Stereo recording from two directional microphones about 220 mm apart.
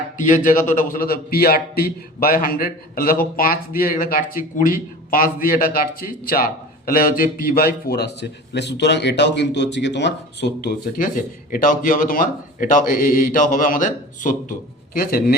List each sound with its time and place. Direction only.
0.4 s a man's voice: 35° left (ahead or behind)